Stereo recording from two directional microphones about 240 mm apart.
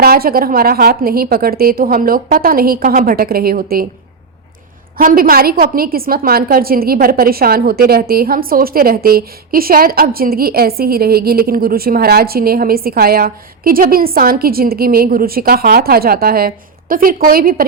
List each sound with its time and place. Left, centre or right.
0.0 s a woman's voice: right
4.9 s a woman's voice: right